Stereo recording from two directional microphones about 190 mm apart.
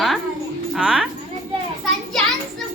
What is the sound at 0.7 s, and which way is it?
Speech, 5° right (ahead or behind).